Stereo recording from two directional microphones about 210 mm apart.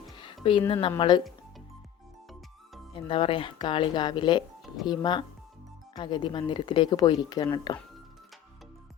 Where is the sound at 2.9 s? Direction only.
25° left (ahead or behind).